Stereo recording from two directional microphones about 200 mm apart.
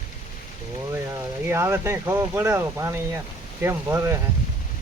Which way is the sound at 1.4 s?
15° right (ahead or behind).